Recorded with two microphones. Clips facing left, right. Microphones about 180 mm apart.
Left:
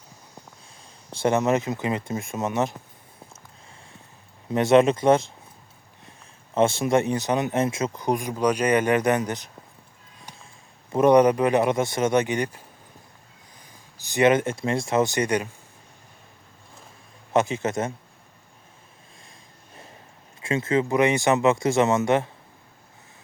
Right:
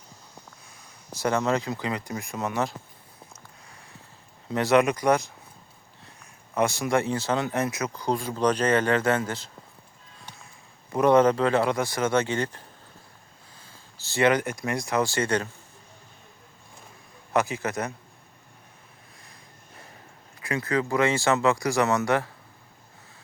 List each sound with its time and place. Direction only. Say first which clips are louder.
0.8 s speech: left 4 dB; 25° left (ahead or behind)
4.4 s speech: left 4 dB; 20° left (ahead or behind)
10.9 s a man's voice: left 2 dB; 20° left (ahead or behind)
14.0 s speech: left 3 dB; 20° left (ahead or behind)
17.3 s speech: left 3 dB; 25° left (ahead or behind)
20.4 s speech: left 4 dB; 25° left (ahead or behind)